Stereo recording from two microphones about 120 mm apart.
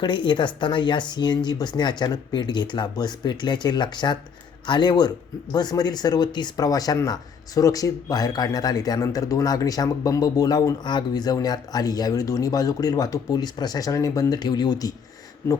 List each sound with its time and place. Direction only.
0.0 s speech: 40° left (ahead or behind)